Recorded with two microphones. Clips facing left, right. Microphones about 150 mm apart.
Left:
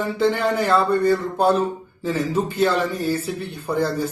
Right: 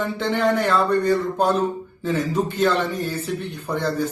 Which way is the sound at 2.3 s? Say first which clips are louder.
Left 1 dB; 10° left (ahead or behind).